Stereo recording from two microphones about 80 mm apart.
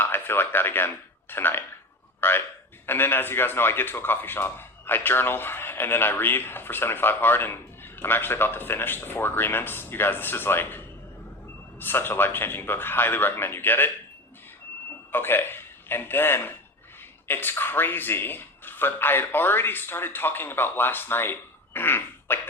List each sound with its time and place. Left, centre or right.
0.0 s a man's voice: left
15.1 s a man's voice: left